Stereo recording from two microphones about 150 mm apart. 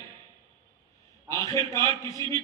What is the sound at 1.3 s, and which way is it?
A man's voice, 20° left (ahead or behind).